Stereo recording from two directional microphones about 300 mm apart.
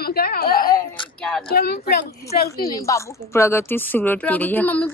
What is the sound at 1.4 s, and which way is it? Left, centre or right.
Speech, left.